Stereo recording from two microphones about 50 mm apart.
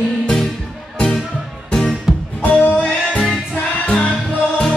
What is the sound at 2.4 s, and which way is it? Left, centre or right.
Music, left.